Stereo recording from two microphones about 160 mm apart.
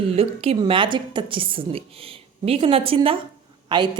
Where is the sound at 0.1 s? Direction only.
35° right (ahead or behind).